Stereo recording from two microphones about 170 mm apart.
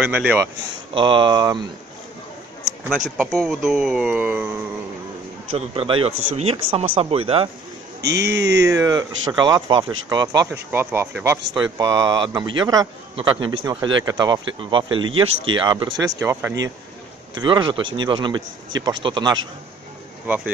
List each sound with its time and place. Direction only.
0.0 s speech: 10° right (ahead or behind)
0.9 s speech: 30° right (ahead or behind)
2.9 s speech: centre (ahead or behind)
5.8 s speech: 35° right (ahead or behind)
8.0 s speech: 80° right
8.6 s speech: 20° right (ahead or behind)
10.5 s speech: 10° right (ahead or behind)
16.2 s speech: 15° right (ahead or behind)
17.4 s speech: 30° right (ahead or behind)
20.2 s speech: 10° right (ahead or behind)